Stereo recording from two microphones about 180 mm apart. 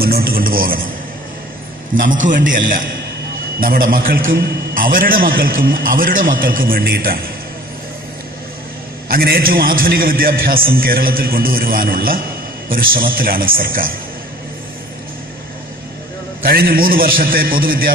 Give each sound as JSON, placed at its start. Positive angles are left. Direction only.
{"t": 0.0, "sound": "a man's voice", "side_deg": -55}
{"t": 2.0, "sound": "a man's voice", "side_deg": -45}
{"t": 3.5, "sound": "a man's voice", "side_deg": -55}
{"t": 9.1, "sound": "a man's voice", "side_deg": -55}
{"t": 16.4, "sound": "a man's voice", "side_deg": -55}